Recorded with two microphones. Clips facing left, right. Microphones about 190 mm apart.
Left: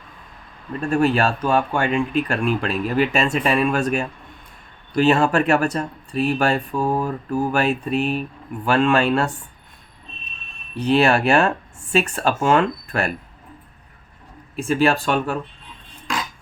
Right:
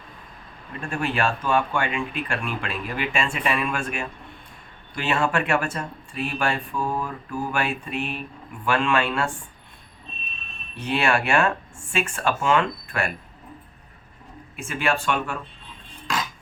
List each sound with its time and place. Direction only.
0.8 s speech: 40° left (ahead or behind)
10.8 s speech: 35° left (ahead or behind)
14.5 s speech: 35° left (ahead or behind)